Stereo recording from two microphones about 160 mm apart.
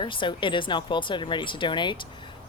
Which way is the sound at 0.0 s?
30° left (ahead or behind).